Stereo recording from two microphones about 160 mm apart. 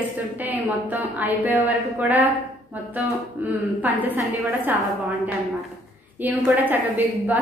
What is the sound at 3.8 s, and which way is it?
Speech, 10° right (ahead or behind).